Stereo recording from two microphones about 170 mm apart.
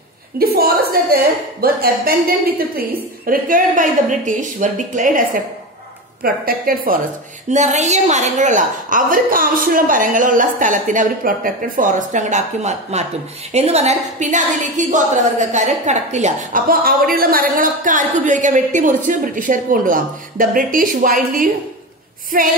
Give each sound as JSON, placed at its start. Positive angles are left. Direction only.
{"t": 0.4, "sound": "a woman's voice", "side_deg": -60}
{"t": 7.4, "sound": "a woman's voice", "side_deg": -45}